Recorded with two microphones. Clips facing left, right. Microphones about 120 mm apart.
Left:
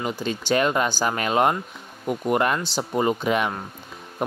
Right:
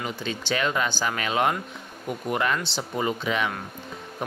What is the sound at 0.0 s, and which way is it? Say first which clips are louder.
Speech: left 4 dB; 40° left (ahead or behind).